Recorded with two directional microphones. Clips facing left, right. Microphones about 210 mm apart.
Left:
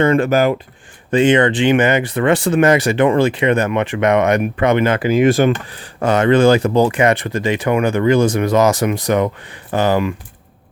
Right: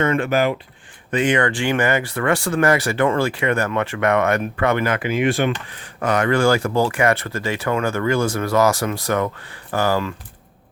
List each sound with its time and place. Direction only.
0.0 s speech: 35° left (ahead or behind)
1.1 s speech: 25° left (ahead or behind)
4.9 s speech: 35° left (ahead or behind)
5.7 s speech: 30° left (ahead or behind)